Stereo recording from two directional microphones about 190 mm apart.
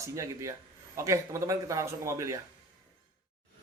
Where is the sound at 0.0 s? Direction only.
15° right (ahead or behind).